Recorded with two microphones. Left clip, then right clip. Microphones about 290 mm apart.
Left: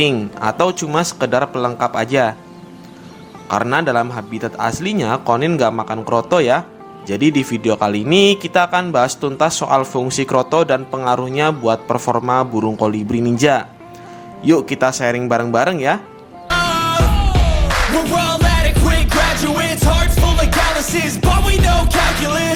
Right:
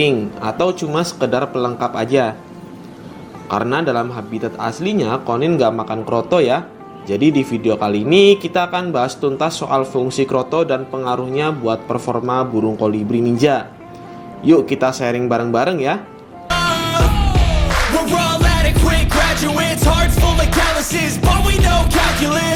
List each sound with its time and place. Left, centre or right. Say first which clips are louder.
0.0 s speech: even; left
3.5 s speech: left 2 dB; left
16.5 s music: left 1 dB; centre